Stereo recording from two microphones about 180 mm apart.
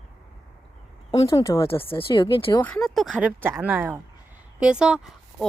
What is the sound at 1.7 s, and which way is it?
Speech, 30° left (ahead or behind).